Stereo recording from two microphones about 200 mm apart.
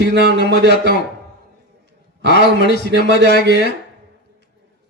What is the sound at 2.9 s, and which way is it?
Speech, 60° right (ahead or behind).